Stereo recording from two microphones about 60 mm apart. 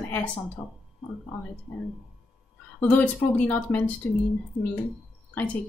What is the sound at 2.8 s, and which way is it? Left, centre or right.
Speech, left.